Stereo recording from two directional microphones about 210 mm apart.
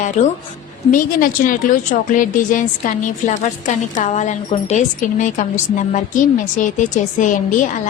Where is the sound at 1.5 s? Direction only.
40° left (ahead or behind).